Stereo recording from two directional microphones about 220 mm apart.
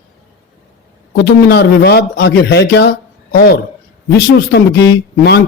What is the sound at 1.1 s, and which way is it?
A man's voice, 45° left (ahead or behind).